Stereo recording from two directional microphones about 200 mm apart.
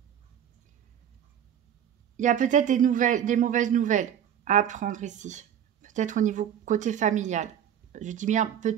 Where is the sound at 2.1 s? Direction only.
40° right (ahead or behind).